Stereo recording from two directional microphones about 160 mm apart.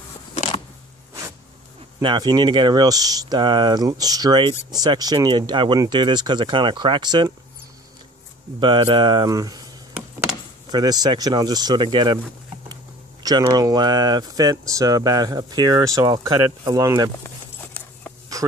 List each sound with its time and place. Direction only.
0.3 s a sound: 35° left (ahead or behind)
2.0 s speech: 25° right (ahead or behind)
8.5 s speech: 30° right (ahead or behind)
10.7 s speech: 25° right (ahead or behind)
13.2 s speech: 25° right (ahead or behind)
17.6 s a sound: 10° left (ahead or behind)